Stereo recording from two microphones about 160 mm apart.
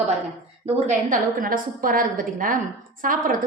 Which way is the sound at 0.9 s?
60° right (ahead or behind).